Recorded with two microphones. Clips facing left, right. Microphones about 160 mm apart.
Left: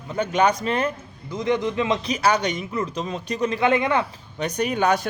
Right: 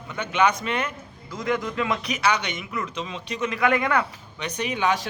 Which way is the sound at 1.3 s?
20° left (ahead or behind).